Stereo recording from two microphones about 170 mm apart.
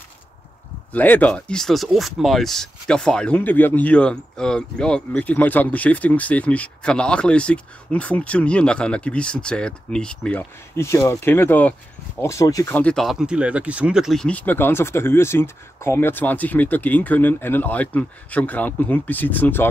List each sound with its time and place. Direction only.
0.9 s speech: 10° left (ahead or behind)
12.7 s speech: 5° left (ahead or behind)